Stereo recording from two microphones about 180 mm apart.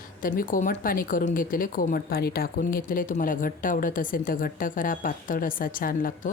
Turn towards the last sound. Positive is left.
turn(degrees=50)  # may be behind; listen again after turning